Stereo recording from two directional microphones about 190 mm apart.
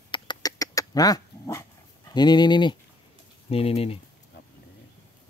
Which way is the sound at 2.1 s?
20° left (ahead or behind).